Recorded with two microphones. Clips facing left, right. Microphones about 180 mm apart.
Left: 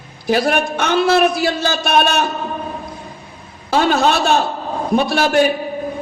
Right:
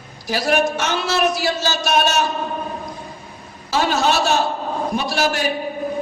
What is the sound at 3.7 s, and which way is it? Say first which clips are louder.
A man's voice: left 4 dB; 55° left (ahead or behind).